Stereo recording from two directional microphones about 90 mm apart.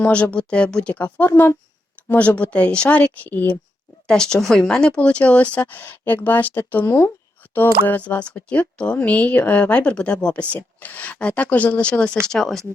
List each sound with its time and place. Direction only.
0.0 s speech: 15° left (ahead or behind)